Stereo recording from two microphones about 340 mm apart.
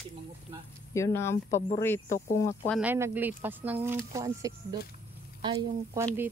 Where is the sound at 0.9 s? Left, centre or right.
Centre.